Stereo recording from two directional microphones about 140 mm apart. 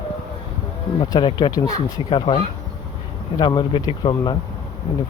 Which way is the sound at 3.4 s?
35° left (ahead or behind).